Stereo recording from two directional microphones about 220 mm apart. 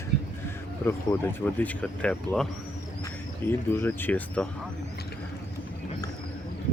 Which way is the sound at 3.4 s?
10° left (ahead or behind).